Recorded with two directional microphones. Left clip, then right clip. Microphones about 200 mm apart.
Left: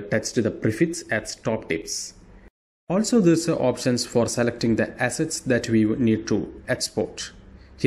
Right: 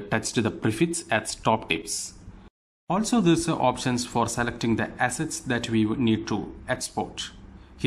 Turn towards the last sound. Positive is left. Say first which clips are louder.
# left 3 dB
turn(degrees=5)  # may be behind; listen again after turning